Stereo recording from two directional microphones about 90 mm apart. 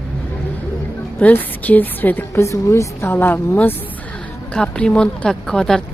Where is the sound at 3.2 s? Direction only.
20° left (ahead or behind).